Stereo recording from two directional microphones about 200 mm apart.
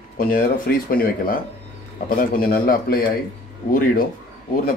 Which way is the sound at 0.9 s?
45° left (ahead or behind).